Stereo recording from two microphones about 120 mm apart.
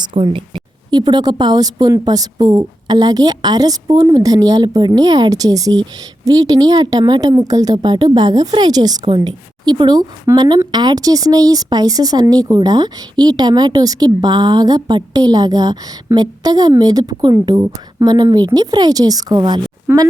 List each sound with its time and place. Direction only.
0.2 s speech: 50° right (ahead or behind)